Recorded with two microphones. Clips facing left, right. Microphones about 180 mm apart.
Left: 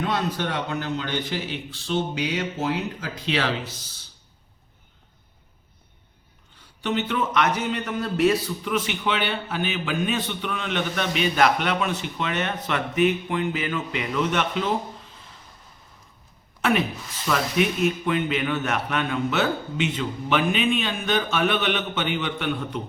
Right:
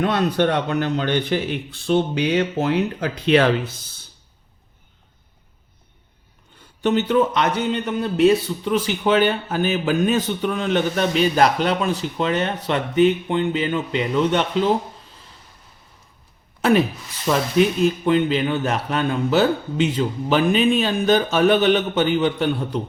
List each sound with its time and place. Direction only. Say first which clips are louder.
0.0 s a man's voice: right 7 dB; 60° right (ahead or behind)
6.8 s a man's voice: right 7 dB; 40° right (ahead or behind)
16.6 s a sound: right 6 dB; 35° right (ahead or behind)
17.2 s a man's voice: right 5 dB; 30° right (ahead or behind)